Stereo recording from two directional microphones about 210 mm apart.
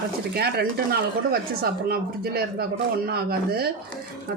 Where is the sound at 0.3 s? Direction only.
50° right (ahead or behind).